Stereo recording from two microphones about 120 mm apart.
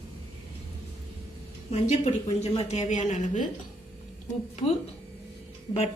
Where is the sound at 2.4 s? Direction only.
60° left (ahead or behind); by 3.4 s 90° left.